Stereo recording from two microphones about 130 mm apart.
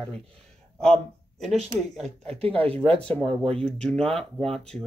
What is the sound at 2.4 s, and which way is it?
Speech, 45° right (ahead or behind).